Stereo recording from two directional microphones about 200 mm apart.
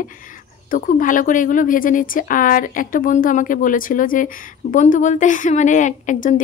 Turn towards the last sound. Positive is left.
turn(degrees=40)  # may be behind; listen again after turning